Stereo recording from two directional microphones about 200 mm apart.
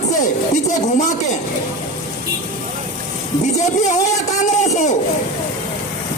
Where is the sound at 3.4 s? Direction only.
35° left (ahead or behind).